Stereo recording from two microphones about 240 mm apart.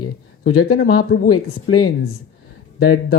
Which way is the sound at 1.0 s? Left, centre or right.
Left.